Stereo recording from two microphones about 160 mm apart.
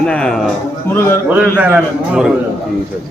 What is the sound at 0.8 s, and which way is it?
Speech, 15° left (ahead or behind).